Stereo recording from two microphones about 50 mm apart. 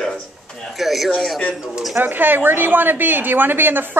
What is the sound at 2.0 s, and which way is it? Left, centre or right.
A woman's voice, right.